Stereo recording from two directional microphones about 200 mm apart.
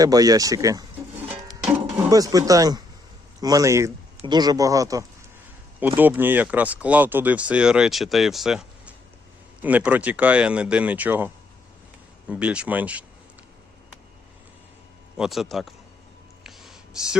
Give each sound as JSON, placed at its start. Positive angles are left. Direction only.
{"t": 0.0, "sound": "speech", "side_deg": -20}
{"t": 2.0, "sound": "speech", "side_deg": -15}
{"t": 12.3, "sound": "speech", "side_deg": -5}
{"t": 15.2, "sound": "speech", "side_deg": 0}
{"t": 16.4, "sound": "a sound", "side_deg": 0}